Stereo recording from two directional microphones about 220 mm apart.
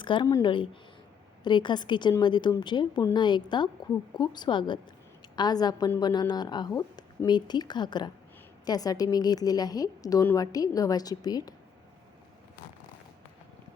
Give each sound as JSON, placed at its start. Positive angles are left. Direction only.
{"t": 0.0, "sound": "a woman's voice", "side_deg": 20}